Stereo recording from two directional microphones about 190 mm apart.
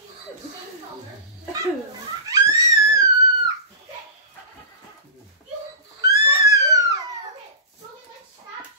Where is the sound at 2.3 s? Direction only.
15° right (ahead or behind).